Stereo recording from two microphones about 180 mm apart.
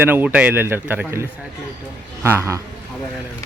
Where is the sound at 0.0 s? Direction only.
10° right (ahead or behind).